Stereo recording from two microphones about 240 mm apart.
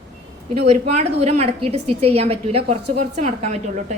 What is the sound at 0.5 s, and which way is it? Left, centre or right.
A woman's voice, right.